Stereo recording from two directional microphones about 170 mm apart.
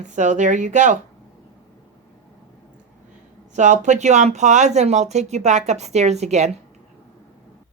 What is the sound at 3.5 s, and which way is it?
Speech, 45° right (ahead or behind).